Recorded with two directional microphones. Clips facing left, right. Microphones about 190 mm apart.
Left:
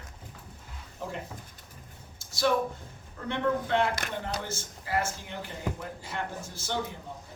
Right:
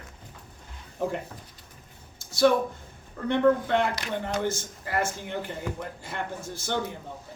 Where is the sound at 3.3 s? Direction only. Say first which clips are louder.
Right 6 dB; 55° right (ahead or behind).